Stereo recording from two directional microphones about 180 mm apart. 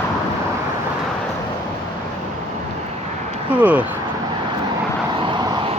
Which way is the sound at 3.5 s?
10° right (ahead or behind).